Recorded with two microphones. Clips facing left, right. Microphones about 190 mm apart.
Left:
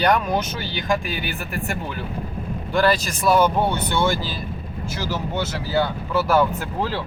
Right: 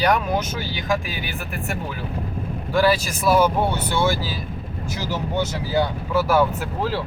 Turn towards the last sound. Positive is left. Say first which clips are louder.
# right 1 dB
turn(degrees=-5)  # may be behind; listen again after turning